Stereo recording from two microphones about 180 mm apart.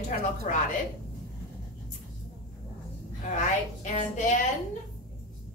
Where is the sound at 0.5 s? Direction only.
45° left (ahead or behind).